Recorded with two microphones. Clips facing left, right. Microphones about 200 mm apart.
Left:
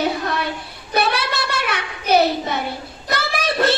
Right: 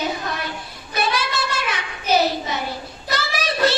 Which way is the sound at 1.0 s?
60° left (ahead or behind).